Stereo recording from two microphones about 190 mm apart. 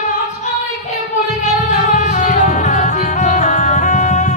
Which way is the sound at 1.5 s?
40° left (ahead or behind).